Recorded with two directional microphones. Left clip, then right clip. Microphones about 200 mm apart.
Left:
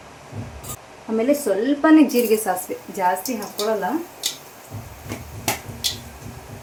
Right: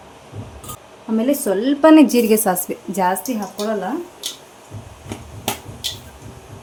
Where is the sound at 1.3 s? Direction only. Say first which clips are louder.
Right 1 dB; 50° right (ahead or behind).